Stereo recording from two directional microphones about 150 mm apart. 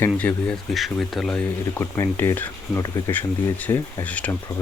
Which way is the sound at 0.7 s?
Centre (ahead or behind).